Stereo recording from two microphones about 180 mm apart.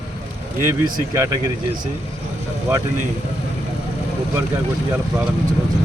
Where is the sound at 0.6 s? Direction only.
15° right (ahead or behind).